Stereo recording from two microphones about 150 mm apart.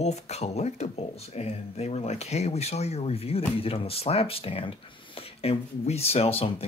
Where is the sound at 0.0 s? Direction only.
45° left (ahead or behind).